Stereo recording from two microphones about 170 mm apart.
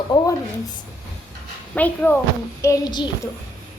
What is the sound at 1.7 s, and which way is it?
Speech, 10° left (ahead or behind).